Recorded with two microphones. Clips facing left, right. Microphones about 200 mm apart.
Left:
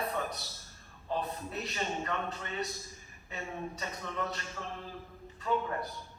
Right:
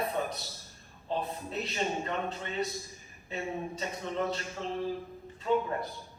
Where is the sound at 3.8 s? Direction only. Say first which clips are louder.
Right 6 dB; 25° right (ahead or behind).